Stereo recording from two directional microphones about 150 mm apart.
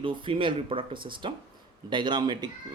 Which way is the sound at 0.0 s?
35° right (ahead or behind).